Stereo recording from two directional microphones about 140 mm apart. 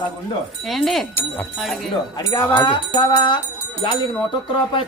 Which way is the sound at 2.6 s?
35° left (ahead or behind).